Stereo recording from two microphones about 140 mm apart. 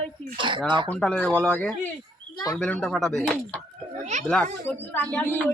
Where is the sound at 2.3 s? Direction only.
25° left (ahead or behind).